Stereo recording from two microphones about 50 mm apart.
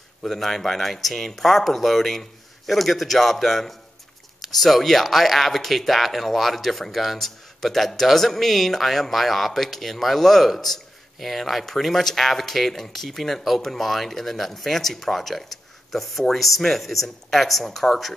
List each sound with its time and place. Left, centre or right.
0.2 s speech: centre